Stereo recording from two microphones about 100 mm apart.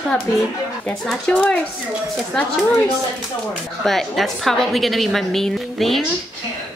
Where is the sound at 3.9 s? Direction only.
Centre (ahead or behind).